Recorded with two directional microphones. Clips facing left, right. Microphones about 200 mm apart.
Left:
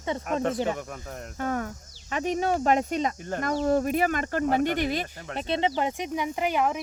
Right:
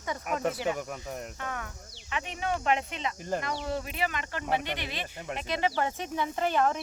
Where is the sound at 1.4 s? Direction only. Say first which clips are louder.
Left 9 dB; 40° left (ahead or behind).